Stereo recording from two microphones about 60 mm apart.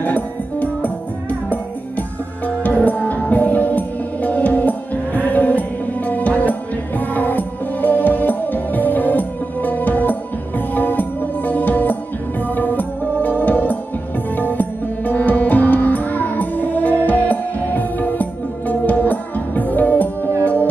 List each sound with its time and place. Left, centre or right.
0.0 s music: left